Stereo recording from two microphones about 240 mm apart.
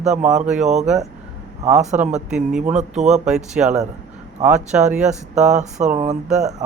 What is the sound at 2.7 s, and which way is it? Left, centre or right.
Speech, right.